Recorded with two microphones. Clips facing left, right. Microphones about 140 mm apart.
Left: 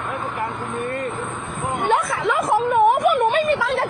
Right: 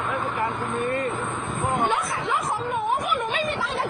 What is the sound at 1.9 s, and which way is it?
Snicker, 70° left (ahead or behind).